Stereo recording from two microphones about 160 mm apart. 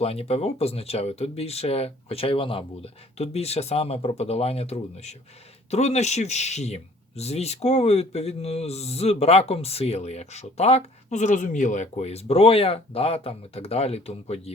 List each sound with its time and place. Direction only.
0.0 s speech: 40° left (ahead or behind)